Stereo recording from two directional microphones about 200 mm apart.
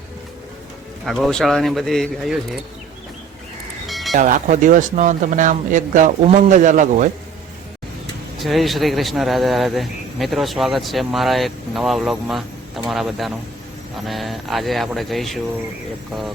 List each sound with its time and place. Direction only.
1.0 s a man's voice: centre (ahead or behind)
3.8 s music: centre (ahead or behind)
4.1 s speech: 40° right (ahead or behind)
8.4 s a man's voice: centre (ahead or behind)